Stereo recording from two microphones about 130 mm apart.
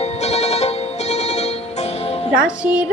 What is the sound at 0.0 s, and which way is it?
Music, 55° left (ahead or behind).